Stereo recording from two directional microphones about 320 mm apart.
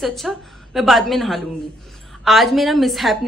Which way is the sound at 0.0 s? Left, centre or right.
Centre.